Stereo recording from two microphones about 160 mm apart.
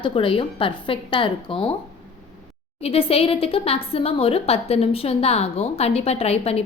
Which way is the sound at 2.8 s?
35° left (ahead or behind).